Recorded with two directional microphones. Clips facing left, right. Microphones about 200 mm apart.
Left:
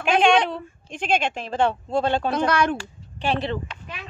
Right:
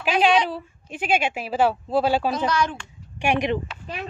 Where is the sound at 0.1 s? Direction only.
50° left (ahead or behind).